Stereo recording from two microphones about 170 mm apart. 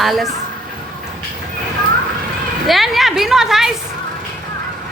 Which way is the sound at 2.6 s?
Centre (ahead or behind).